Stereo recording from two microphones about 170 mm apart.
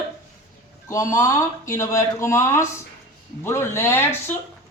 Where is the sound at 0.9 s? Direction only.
20° left (ahead or behind).